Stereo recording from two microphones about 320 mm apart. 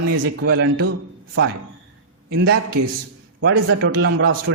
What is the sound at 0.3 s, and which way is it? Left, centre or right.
Speech, right.